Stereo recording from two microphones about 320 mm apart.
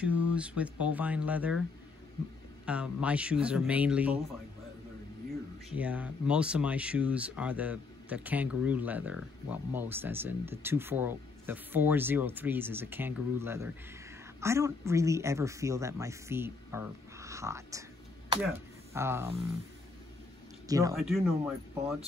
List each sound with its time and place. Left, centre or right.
0.3 s speech: centre
2.6 s speech: centre
5.8 s speech: centre
20.6 s speech: centre
20.9 s speech: centre